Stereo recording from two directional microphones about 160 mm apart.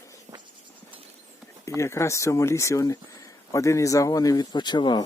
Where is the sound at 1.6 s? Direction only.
20° left (ahead or behind).